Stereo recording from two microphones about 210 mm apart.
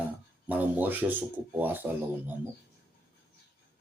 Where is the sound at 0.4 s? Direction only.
10° right (ahead or behind).